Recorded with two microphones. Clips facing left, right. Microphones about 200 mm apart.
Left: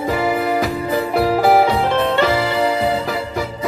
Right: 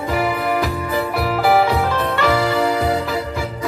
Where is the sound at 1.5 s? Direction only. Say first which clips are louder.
Left 2 dB; 25° left (ahead or behind).